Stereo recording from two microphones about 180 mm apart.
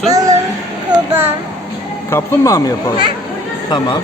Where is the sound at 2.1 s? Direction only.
15° left (ahead or behind).